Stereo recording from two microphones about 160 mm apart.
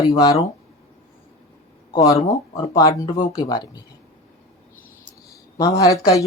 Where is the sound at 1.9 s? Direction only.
20° left (ahead or behind).